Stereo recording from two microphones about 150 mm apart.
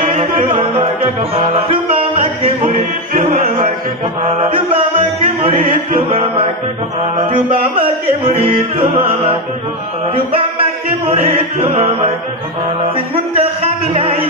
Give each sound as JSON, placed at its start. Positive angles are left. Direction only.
{"t": 0.2, "sound": "music", "side_deg": -40}
{"t": 3.1, "sound": "music", "side_deg": -65}
{"t": 4.4, "sound": "music", "side_deg": -40}
{"t": 10.1, "sound": "music", "side_deg": -40}